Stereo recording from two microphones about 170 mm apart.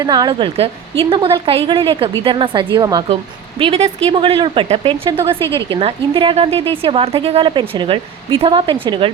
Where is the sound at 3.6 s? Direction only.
35° right (ahead or behind).